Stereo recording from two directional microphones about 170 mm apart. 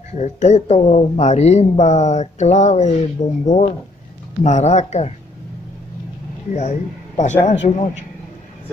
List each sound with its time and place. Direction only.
0.1 s speech: 45° left (ahead or behind)
6.5 s speech: 40° left (ahead or behind)